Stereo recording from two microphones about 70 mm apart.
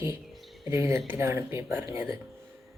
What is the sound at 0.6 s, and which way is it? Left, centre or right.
Speech, right.